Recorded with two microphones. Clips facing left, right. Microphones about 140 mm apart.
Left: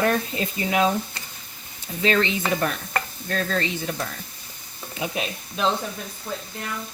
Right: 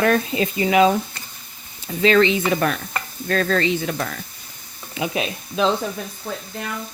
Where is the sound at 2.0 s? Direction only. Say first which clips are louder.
Right 6 dB; 90° right.